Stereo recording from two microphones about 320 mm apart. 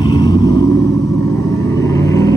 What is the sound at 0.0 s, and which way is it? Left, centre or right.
Vehicle, centre.